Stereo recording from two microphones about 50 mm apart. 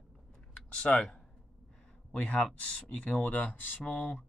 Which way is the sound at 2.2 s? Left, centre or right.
Left.